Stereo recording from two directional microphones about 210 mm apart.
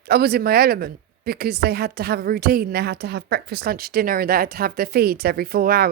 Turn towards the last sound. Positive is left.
turn(degrees=-45)  # may be behind; listen again after turning